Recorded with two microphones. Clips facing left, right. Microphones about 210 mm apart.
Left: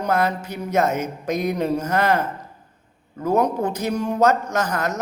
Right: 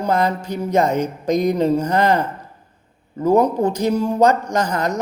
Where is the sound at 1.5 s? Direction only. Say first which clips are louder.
Right 4 dB; 15° right (ahead or behind).